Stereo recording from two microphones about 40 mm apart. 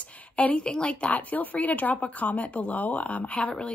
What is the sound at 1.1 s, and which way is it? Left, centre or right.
Speech, left.